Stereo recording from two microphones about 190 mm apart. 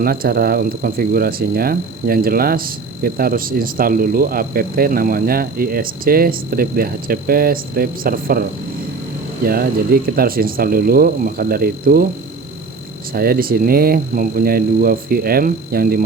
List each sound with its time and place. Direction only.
0.0 s speech: 50° right (ahead or behind)
13.1 s speech: 50° right (ahead or behind)